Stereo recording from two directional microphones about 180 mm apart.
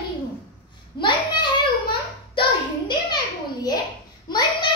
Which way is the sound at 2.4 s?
25° left (ahead or behind).